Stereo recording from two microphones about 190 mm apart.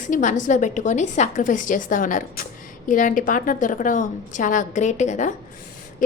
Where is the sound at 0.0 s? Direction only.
40° left (ahead or behind).